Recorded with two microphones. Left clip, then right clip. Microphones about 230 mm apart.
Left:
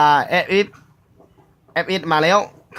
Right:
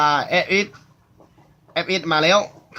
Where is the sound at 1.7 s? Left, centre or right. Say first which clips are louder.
Left 2 dB; left.